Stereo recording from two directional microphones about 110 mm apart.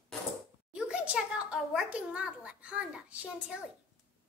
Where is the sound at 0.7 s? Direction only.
10° right (ahead or behind).